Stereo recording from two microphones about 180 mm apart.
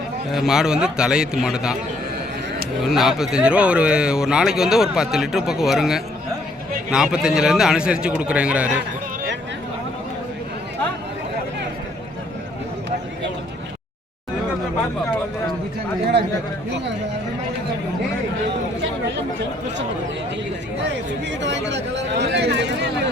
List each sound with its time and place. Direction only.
0.3 s speech: centre (ahead or behind)
2.8 s speech: centre (ahead or behind)
21.2 s speech: 80° right